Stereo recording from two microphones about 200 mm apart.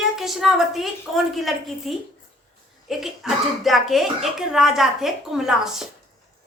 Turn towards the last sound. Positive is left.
turn(degrees=0)  # may be behind; listen again after turning